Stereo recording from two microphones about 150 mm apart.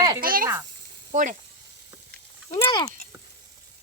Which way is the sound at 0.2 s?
75° right (ahead or behind).